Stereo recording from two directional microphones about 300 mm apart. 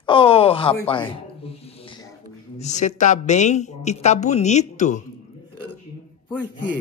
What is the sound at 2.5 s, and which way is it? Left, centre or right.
A woman's voice, left.